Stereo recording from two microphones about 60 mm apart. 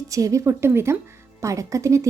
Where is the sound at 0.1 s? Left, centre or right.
Right.